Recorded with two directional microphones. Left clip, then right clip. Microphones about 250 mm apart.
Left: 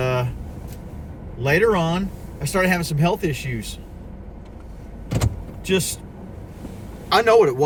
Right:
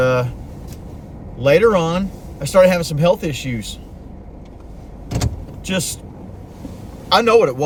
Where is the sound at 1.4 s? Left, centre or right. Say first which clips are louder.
Right 5 dB; centre.